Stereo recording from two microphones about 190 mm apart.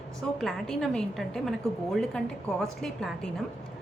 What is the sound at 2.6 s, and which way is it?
Speech, centre (ahead or behind).